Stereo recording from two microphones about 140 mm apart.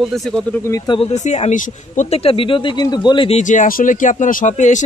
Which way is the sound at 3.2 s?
55° left (ahead or behind).